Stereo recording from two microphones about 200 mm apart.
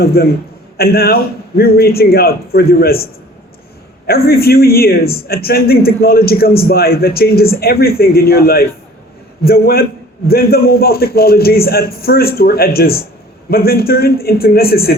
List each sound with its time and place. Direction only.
0.0 s a man's voice: 50° left (ahead or behind)